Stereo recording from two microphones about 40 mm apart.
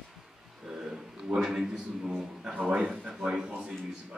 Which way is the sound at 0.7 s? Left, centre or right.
Centre.